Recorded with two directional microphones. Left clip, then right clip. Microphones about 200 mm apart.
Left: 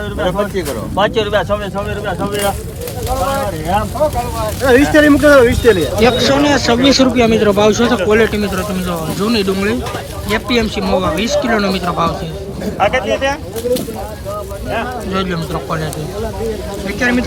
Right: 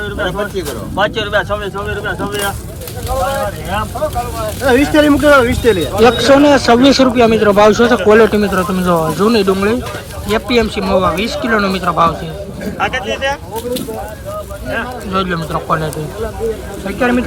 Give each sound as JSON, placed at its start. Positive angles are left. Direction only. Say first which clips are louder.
{"t": 0.2, "sound": "speech", "louder": "left 3 dB", "side_deg": 45}
{"t": 4.0, "sound": "speech", "louder": "left 5 dB", "side_deg": 40}
{"t": 4.6, "sound": "speech", "louder": "left 1 dB", "side_deg": 0}
{"t": 15.1, "sound": "speech", "louder": "right 5 dB", "side_deg": 10}